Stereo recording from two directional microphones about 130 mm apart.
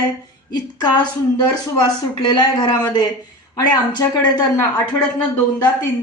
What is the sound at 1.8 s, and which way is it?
Speech, 30° left (ahead or behind).